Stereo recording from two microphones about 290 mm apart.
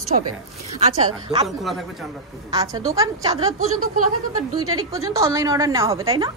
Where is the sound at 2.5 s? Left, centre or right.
Centre.